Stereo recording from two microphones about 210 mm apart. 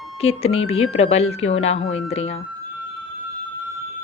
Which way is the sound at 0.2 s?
30° left (ahead or behind).